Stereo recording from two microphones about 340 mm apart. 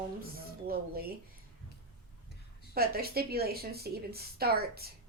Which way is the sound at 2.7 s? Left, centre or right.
Right.